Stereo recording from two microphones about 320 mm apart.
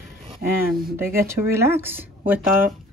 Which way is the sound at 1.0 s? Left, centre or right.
Right.